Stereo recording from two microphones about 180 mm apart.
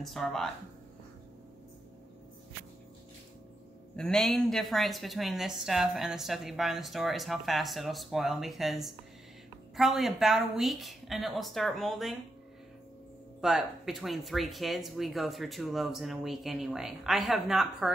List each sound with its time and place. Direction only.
0.0 s a woman's voice: centre (ahead or behind)
3.9 s a woman's voice: 5° left (ahead or behind)
13.4 s a woman's voice: centre (ahead or behind)